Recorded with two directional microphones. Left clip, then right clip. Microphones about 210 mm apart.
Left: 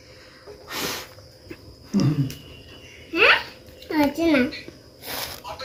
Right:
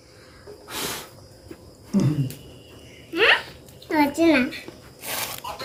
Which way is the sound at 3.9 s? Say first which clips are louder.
Right 2 dB; 35° right (ahead or behind).